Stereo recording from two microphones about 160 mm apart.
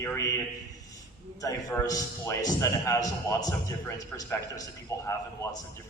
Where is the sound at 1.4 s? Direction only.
20° left (ahead or behind).